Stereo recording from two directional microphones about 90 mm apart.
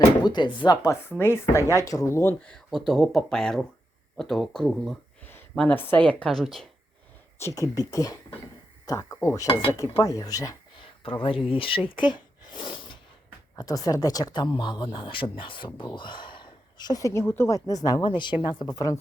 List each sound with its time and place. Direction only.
0.2 s speech: 55° left (ahead or behind)
1.2 s a woman's voice: 25° left (ahead or behind)
1.7 s speech: 40° left (ahead or behind)
2.4 s speech: 10° left (ahead or behind)
2.7 s speech: centre (ahead or behind)
5.5 s a woman's voice: 20° left (ahead or behind)
6.2 s speech: centre (ahead or behind)
7.3 s speech: 35° left (ahead or behind)
10.8 s a sound: 75° left (ahead or behind)
11.4 s speech: 85° left
11.9 s a sound: 60° left (ahead or behind)
13.6 s a woman's voice: 45° left (ahead or behind); by 17.6 s 25° left (ahead or behind)
17.7 s speech: 45° left (ahead or behind)